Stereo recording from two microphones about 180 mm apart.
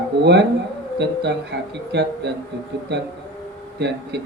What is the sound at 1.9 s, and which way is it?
Speech, 70° right (ahead or behind).